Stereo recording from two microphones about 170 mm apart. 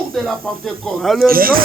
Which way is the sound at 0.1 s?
Centre (ahead or behind).